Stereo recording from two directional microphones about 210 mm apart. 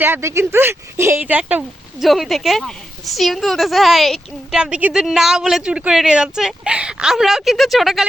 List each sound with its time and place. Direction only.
0.0 s speech: 10° right (ahead or behind)